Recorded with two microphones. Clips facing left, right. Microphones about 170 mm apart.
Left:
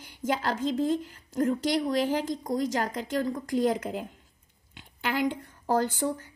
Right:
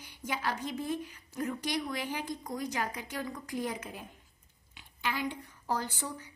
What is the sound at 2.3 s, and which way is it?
A woman's voice, 90° left.